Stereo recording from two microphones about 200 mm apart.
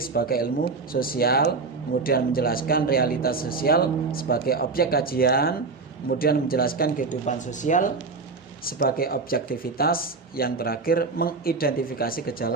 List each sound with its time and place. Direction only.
0.0 s speech: 50° left (ahead or behind)
8.6 s speech: 50° left (ahead or behind)